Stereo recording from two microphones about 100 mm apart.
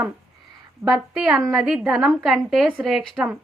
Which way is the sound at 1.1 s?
Centre (ahead or behind).